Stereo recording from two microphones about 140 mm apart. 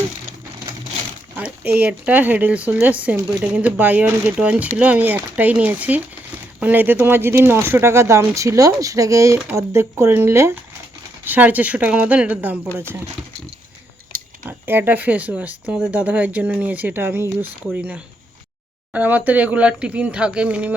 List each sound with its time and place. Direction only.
1.4 s speech: 10° right (ahead or behind)
14.4 s speech: 15° right (ahead or behind)